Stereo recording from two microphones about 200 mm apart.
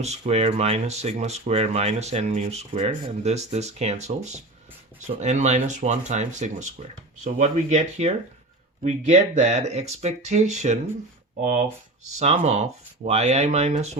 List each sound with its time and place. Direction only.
0.0 s speech: 30° right (ahead or behind)
12.2 s speech: 35° right (ahead or behind)